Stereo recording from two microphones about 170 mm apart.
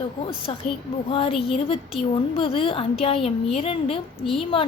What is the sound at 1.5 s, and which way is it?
A woman's voice, 35° left (ahead or behind).